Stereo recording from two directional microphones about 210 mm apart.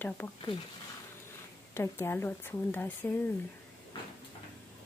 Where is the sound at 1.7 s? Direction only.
10° left (ahead or behind).